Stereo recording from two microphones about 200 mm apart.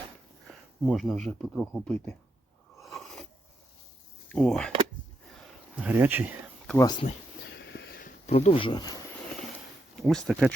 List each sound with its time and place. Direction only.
0.4 s speech: centre (ahead or behind)
2.8 s a sound: centre (ahead or behind)
4.3 s speech: 5° left (ahead or behind)
5.7 s speech: 10° right (ahead or behind)
6.7 s speech: 20° left (ahead or behind)
7.5 s a sound: 60° left (ahead or behind)
8.3 s speech: 30° left (ahead or behind)
10.0 s speech: centre (ahead or behind)